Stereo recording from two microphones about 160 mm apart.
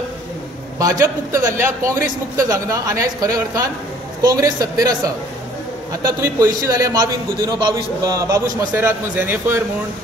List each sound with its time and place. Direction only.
0.7 s a man's voice: 20° right (ahead or behind)